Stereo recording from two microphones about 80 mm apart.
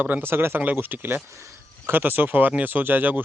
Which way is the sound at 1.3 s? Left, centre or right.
Right.